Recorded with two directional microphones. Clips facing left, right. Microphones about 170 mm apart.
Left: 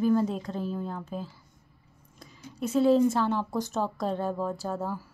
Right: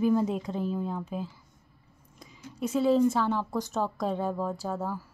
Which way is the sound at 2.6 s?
5° right (ahead or behind).